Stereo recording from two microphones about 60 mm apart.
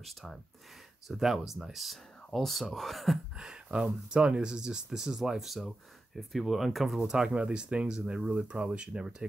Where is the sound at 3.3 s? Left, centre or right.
Centre.